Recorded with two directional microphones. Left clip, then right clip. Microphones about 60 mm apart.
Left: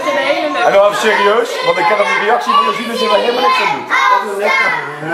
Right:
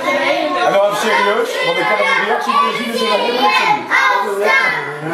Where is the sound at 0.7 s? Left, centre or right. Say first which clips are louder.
Left 5 dB; left.